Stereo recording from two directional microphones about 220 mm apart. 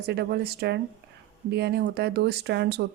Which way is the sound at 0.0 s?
50° right (ahead or behind).